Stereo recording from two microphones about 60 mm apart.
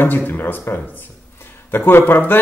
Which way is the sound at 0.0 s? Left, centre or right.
Left.